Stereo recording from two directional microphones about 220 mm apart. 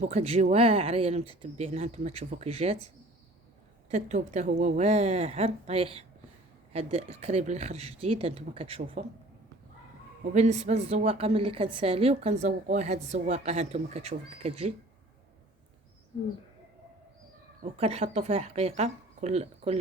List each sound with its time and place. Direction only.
0.0 s a woman's voice: 30° right (ahead or behind)
3.8 s a woman's voice: 30° right (ahead or behind)
10.3 s a woman's voice: 30° right (ahead or behind)
17.6 s a woman's voice: 30° right (ahead or behind)